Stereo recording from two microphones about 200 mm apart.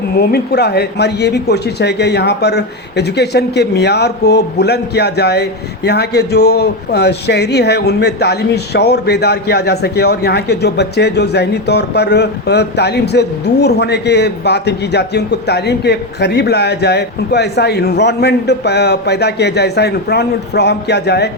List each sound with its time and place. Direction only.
0.2 s speech: 50° left (ahead or behind)